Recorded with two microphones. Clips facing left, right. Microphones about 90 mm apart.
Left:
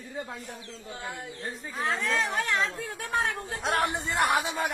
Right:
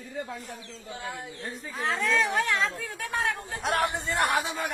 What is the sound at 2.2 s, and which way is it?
A woman's voice, 25° left (ahead or behind).